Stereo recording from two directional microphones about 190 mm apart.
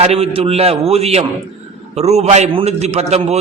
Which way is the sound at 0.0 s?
30° right (ahead or behind).